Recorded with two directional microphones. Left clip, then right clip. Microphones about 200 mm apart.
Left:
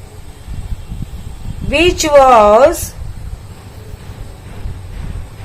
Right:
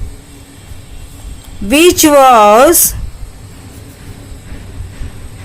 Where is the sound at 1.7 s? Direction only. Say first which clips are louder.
Right 3 dB; 45° right (ahead or behind).